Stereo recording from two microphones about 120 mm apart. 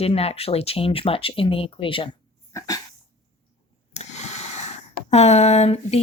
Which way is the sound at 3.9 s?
70° left (ahead or behind).